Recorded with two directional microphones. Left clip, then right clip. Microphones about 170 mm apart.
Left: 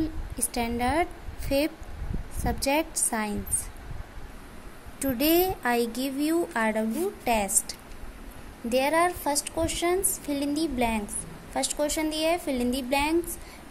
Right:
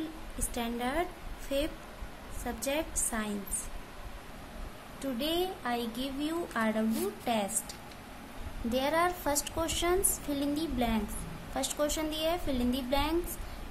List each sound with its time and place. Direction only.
0.6 s a woman's voice: 25° left (ahead or behind)
2.4 s a woman's voice: 25° left (ahead or behind)
5.0 s a woman's voice: 35° left (ahead or behind); by 7.4 s 20° left (ahead or behind)
8.6 s a woman's voice: 15° left (ahead or behind)